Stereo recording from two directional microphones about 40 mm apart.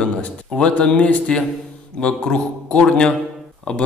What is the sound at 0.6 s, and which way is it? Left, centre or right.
Speech, left.